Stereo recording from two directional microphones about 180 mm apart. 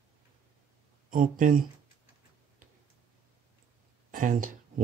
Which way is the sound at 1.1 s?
50° right (ahead or behind).